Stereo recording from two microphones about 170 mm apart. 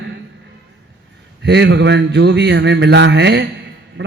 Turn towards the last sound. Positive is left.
turn(degrees=-90)